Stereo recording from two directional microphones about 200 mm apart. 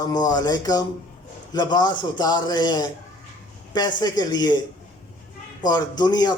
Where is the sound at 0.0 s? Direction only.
20° left (ahead or behind).